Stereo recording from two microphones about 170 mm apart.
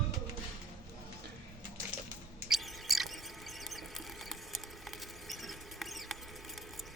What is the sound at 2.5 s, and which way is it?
Mouse, centre (ahead or behind).